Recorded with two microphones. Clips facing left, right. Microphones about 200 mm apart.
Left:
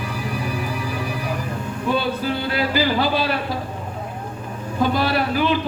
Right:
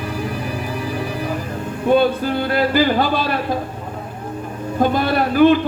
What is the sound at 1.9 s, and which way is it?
Speech, 50° right (ahead or behind).